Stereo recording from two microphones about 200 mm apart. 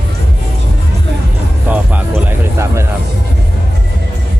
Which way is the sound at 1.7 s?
10° right (ahead or behind).